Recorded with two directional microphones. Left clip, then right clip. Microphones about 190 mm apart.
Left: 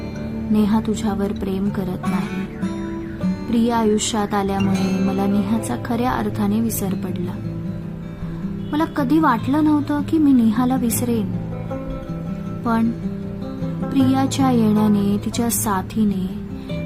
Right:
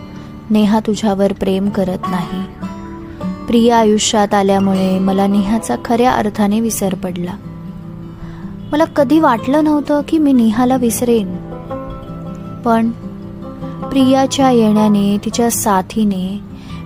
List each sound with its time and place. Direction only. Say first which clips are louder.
0.5 s a woman's voice: right 6 dB; 35° right (ahead or behind)
3.5 s a woman's voice: right 8 dB; 35° right (ahead or behind)
8.7 s a woman's voice: right 8 dB; 30° right (ahead or behind)
13.9 s a woman's voice: right 7 dB; 30° right (ahead or behind)